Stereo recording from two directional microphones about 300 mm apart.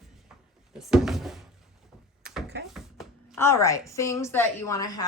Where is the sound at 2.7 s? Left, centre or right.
Centre.